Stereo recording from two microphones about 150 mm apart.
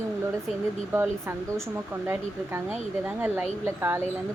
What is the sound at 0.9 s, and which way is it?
Speech, 15° right (ahead or behind).